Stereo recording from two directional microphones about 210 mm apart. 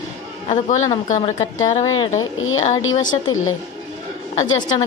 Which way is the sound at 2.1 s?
70° left (ahead or behind).